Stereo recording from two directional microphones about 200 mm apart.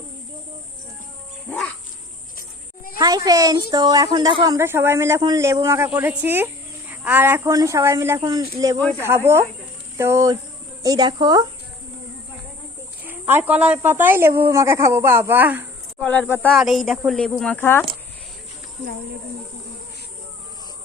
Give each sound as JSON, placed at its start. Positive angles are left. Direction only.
{"t": 1.5, "sound": "music", "side_deg": 5}
{"t": 3.0, "sound": "a child's voice", "side_deg": -20}
{"t": 13.1, "sound": "speech", "side_deg": -10}
{"t": 16.3, "sound": "speech", "side_deg": 5}